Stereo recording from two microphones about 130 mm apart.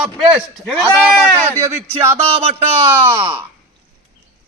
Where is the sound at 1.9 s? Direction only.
45° right (ahead or behind).